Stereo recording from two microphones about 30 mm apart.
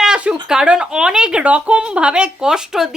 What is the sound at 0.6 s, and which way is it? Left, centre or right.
Speech, right.